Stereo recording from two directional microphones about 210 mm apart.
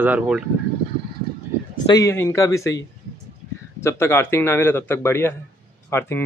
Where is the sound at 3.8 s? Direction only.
10° left (ahead or behind).